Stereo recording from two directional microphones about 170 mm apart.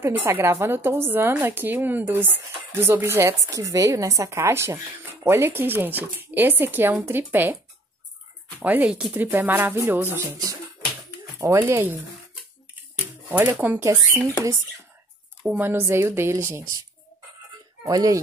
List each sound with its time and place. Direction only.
0.0 s a woman's voice: 10° right (ahead or behind)
8.5 s a woman's voice: 10° right (ahead or behind)
13.3 s a woman's voice: 10° right (ahead or behind)
15.4 s a woman's voice: 10° right (ahead or behind)
17.8 s speech: 20° right (ahead or behind)